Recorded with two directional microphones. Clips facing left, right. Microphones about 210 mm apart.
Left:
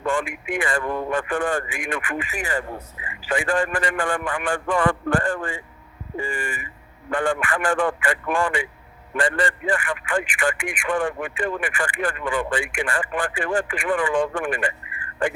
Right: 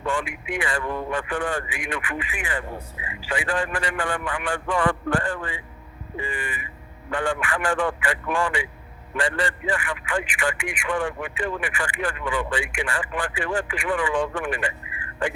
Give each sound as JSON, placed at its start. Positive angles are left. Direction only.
{"t": 0.0, "sound": "a man's voice", "side_deg": 50}